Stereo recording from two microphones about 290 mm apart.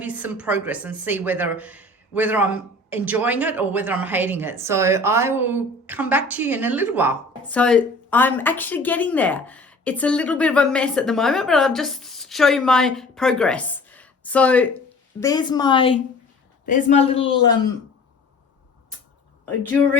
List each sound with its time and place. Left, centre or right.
0.0 s a woman's voice: centre
7.5 s a woman's voice: centre